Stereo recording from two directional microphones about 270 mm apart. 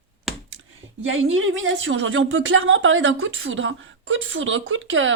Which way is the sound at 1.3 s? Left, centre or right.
Right.